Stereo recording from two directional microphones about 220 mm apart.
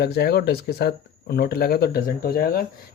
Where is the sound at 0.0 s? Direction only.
45° left (ahead or behind).